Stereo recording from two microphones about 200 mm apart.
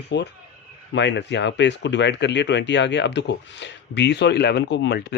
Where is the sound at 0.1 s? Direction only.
60° left (ahead or behind).